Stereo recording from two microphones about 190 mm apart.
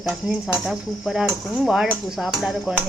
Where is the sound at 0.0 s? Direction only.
Centre (ahead or behind).